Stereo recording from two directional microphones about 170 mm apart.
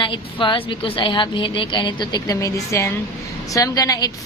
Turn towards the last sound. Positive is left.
turn(degrees=20)  # may be behind; listen again after turning